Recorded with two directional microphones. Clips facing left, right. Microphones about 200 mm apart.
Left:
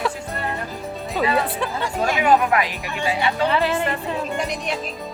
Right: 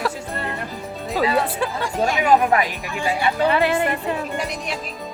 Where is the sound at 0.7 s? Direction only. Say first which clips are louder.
Even; centre (ahead or behind).